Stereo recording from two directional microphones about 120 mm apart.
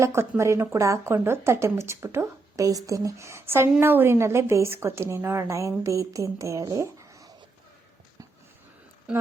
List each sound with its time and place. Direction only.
0.0 s speech: 25° right (ahead or behind)